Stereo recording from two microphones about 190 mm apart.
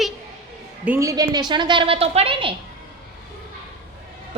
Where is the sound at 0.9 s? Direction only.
15° right (ahead or behind).